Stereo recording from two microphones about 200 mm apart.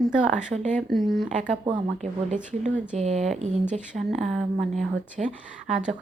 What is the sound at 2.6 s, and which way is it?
Speech, 35° right (ahead or behind).